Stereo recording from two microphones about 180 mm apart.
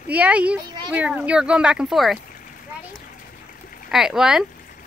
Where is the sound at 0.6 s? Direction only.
25° right (ahead or behind).